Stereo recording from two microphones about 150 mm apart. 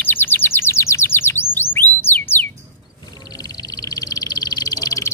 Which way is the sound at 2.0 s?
15° left (ahead or behind).